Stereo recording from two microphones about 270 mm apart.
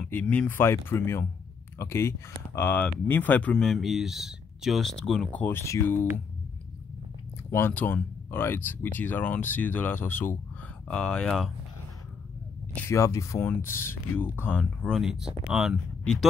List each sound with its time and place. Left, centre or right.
0.0 s speech: centre
7.5 s speech: centre
12.7 s speech: centre